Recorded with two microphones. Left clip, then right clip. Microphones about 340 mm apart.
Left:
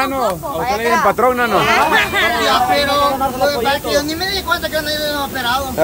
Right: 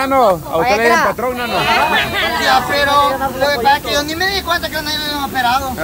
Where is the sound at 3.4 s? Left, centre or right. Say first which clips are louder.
Right 6 dB; centre.